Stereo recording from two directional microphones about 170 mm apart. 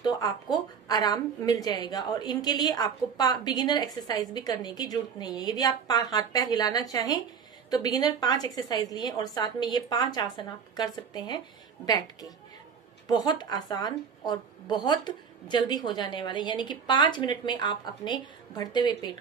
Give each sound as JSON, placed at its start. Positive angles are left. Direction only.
{"t": 0.0, "sound": "a woman's voice", "side_deg": 25}